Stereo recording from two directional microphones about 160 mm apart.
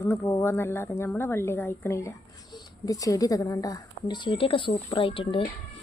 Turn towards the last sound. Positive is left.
turn(degrees=35)  # may be behind; listen again after turning